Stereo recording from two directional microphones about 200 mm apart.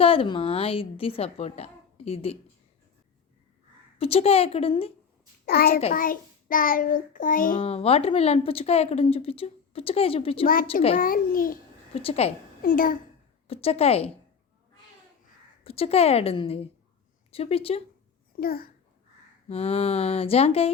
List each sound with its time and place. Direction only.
0.0 s a woman's voice: 25° left (ahead or behind)
3.9 s a woman's voice: 30° left (ahead or behind)
5.5 s child singing: 50° left (ahead or behind)
7.6 s a woman's voice: 30° left (ahead or behind)
10.4 s child singing: 45° left (ahead or behind)
11.9 s a woman's voice: 30° left (ahead or behind)
12.6 s child singing: 45° left (ahead or behind)
13.5 s a woman's voice: 30° left (ahead or behind)
15.6 s a woman's voice: 30° left (ahead or behind)
18.3 s a child's voice: 50° left (ahead or behind)
19.5 s a woman's voice: 30° left (ahead or behind)